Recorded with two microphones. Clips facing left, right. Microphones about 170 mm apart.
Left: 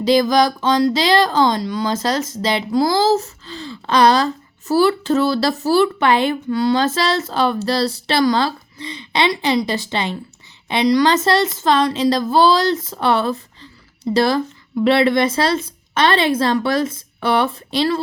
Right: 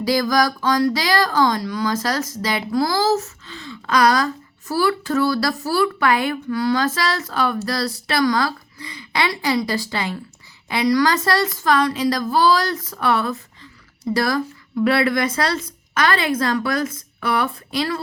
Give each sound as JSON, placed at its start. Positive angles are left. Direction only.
{"t": 0.0, "sound": "speech", "side_deg": 25}